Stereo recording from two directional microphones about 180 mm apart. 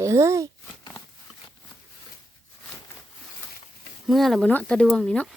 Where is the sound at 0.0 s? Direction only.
15° right (ahead or behind).